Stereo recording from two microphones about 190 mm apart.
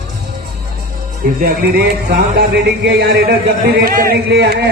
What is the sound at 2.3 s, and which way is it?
Speech, 55° right (ahead or behind).